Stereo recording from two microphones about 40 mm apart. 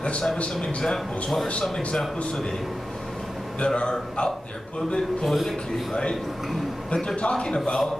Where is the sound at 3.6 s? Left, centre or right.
Left.